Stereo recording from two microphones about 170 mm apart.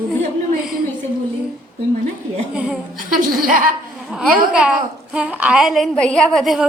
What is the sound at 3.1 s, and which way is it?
Speech, 50° right (ahead or behind).